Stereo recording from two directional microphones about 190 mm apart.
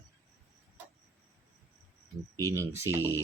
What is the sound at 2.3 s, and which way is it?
Speech, 15° right (ahead or behind).